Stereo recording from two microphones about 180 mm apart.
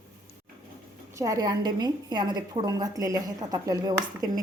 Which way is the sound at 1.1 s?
20° right (ahead or behind).